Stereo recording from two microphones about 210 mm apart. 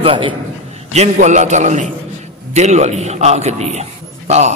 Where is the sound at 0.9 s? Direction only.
35° right (ahead or behind).